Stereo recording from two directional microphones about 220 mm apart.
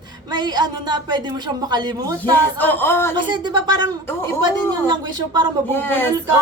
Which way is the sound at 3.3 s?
20° right (ahead or behind).